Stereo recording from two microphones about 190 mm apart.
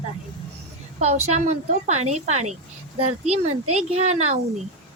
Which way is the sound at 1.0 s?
35° right (ahead or behind).